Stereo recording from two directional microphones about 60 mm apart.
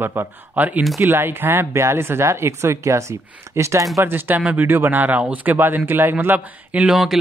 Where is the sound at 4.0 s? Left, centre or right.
Right.